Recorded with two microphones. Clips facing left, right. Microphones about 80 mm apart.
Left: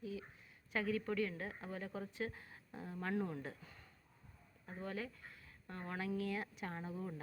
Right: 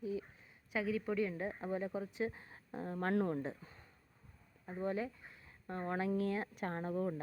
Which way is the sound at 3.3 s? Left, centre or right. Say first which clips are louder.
Right 6 dB; right.